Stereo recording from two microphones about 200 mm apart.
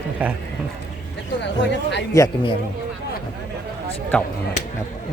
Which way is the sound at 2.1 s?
15° left (ahead or behind).